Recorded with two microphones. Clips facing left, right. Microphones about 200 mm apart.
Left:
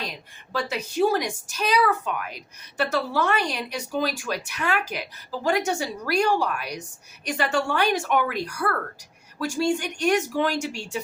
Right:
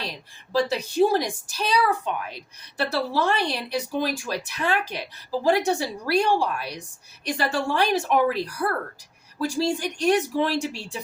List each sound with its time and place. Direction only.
0.5 s a woman's voice: 35° right (ahead or behind)